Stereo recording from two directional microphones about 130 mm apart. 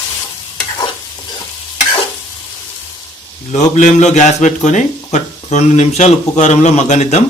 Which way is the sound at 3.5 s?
70° left (ahead or behind).